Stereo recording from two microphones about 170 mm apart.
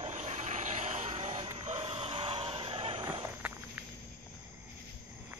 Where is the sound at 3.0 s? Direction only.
10° right (ahead or behind).